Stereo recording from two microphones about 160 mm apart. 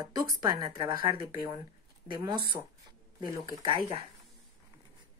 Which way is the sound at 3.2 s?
20° right (ahead or behind).